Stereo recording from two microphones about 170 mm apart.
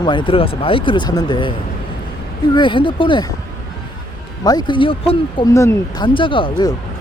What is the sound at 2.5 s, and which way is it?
Speech, 30° left (ahead or behind).